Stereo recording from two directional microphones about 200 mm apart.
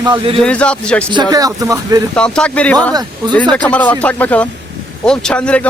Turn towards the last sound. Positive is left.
turn(degrees=5)  # may be behind; listen again after turning